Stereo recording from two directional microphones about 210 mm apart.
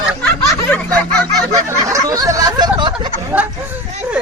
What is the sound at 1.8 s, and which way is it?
Speech, 15° right (ahead or behind).